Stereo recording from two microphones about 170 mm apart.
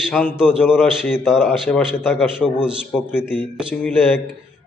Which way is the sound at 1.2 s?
5° right (ahead or behind).